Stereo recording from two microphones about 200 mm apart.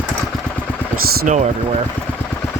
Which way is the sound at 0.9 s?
40° right (ahead or behind).